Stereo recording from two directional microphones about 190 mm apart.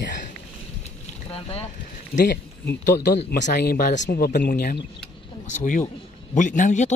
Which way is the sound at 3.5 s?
55° left (ahead or behind).